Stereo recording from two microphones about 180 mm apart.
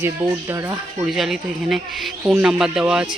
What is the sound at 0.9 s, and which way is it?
Speech, centre (ahead or behind).